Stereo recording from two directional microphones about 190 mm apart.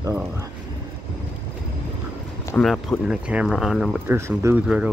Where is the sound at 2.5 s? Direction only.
Centre (ahead or behind).